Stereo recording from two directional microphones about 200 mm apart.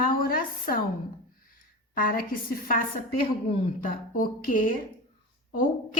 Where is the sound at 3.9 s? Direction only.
45° left (ahead or behind).